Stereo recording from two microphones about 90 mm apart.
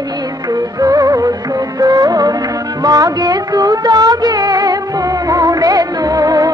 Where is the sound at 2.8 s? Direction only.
45° right (ahead or behind).